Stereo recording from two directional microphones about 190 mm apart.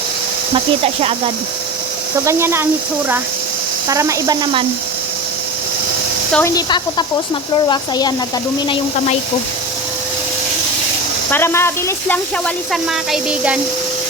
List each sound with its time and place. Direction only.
2.2 s speech: 15° right (ahead or behind)
3.8 s speech: 15° right (ahead or behind)
6.3 s speech: 15° left (ahead or behind)
11.3 s speech: 10° left (ahead or behind)
12.7 s speech: 5° right (ahead or behind)